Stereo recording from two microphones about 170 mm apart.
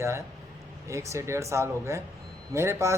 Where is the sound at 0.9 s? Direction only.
15° right (ahead or behind).